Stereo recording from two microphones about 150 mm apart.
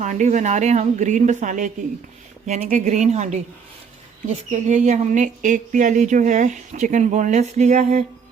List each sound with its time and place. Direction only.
0.0 s a woman's voice: 55° right (ahead or behind)